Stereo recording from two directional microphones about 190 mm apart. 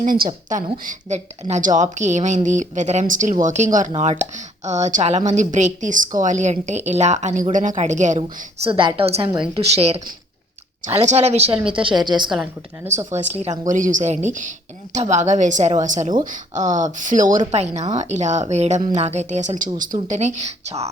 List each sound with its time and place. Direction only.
0.0 s a woman's voice: 45° right (ahead or behind)
8.7 s a woman's voice: 25° right (ahead or behind)
12.3 s a woman's voice: 5° right (ahead or behind)
13.1 s a woman's voice: 40° right (ahead or behind)